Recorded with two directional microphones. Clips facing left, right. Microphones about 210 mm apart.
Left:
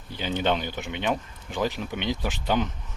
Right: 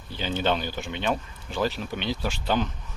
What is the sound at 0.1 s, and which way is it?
Speech, 15° left (ahead or behind).